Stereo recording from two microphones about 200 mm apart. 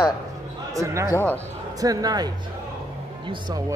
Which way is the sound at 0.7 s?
15° right (ahead or behind).